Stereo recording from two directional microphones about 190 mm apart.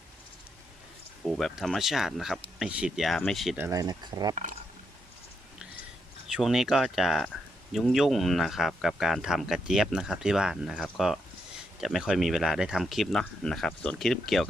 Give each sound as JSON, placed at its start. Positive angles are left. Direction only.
{"t": 1.3, "sound": "speech", "side_deg": 0}
{"t": 3.6, "sound": "speech", "side_deg": -20}
{"t": 6.2, "sound": "speech", "side_deg": 0}